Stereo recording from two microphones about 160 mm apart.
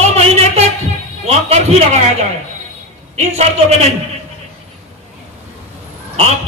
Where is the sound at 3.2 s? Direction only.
45° right (ahead or behind).